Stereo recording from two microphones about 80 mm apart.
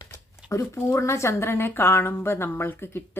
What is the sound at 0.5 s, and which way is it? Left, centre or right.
Speech, left.